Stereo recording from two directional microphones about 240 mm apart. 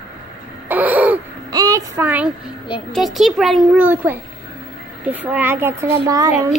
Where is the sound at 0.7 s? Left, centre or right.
Centre.